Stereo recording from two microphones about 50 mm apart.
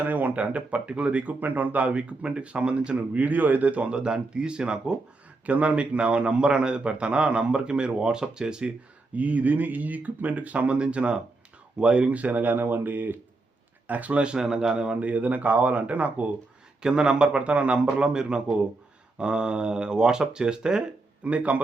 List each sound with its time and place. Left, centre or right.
0.0 s speech: right; by 8.7 s centre
9.1 s speech: right
14.3 s speech: centre; by 16.3 s right
16.8 s speech: centre